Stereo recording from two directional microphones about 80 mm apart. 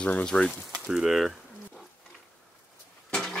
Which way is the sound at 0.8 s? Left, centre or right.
Centre.